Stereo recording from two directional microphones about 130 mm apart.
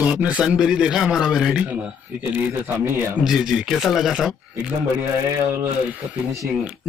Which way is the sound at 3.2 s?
5° right (ahead or behind).